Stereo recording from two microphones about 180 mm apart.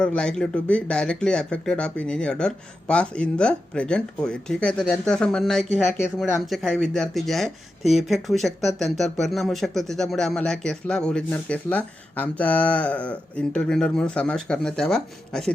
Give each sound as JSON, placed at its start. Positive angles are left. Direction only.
{"t": 0.0, "sound": "speech", "side_deg": 5}